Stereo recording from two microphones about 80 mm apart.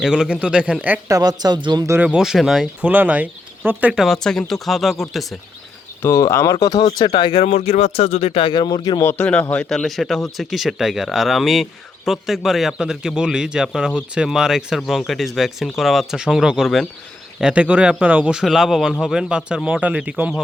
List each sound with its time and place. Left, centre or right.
0.0 s speech: centre
1.0 s speech: right
2.0 s speech: centre
2.8 s speech: right
3.9 s speech: centre
6.0 s speech: left
6.8 s speech: left
8.4 s speech: left
9.0 s speech: left
9.2 s speech: centre
9.6 s speech: centre
17.4 s speech: centre
18.4 s speech: centre